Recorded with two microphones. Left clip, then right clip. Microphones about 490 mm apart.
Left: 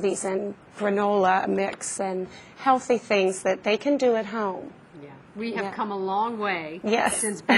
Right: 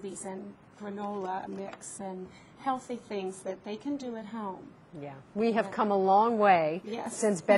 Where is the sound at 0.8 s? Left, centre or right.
Left.